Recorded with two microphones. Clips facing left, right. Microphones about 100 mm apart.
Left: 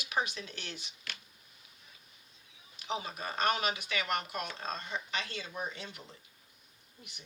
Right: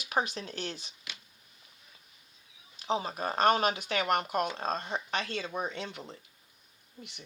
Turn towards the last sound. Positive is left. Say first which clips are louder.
# right 5 dB
turn(degrees=-70)  # may be behind; listen again after turning